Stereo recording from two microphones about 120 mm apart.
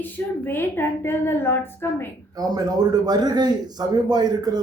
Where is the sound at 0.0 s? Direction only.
15° left (ahead or behind).